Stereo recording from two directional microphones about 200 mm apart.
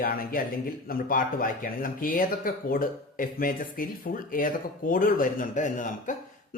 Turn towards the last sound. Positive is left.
turn(degrees=40)  # may be behind; listen again after turning